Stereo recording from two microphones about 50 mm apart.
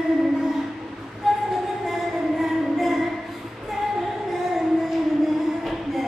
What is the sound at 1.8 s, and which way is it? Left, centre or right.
Music, centre.